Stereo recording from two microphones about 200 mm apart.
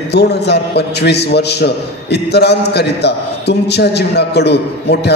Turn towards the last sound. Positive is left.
turn(degrees=55)  # may be behind; listen again after turning